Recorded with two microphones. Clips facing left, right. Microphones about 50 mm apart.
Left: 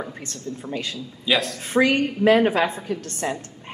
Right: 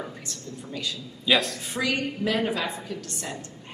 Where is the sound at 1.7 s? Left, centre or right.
Left.